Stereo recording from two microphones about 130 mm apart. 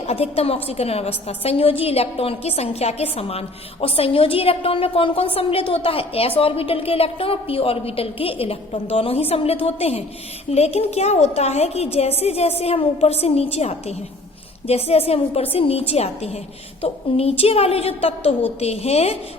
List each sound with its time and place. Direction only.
0.0 s a woman's voice: 50° left (ahead or behind)